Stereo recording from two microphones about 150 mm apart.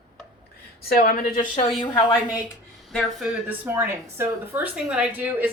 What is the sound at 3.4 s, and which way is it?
A woman's voice, 10° right (ahead or behind).